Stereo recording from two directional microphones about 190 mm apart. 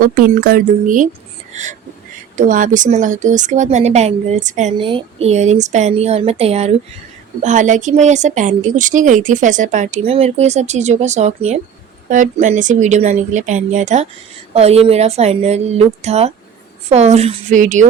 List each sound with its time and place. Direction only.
0.0 s speech: 50° right (ahead or behind)
2.3 s speech: 45° right (ahead or behind)
4.8 s speech: 25° right (ahead or behind)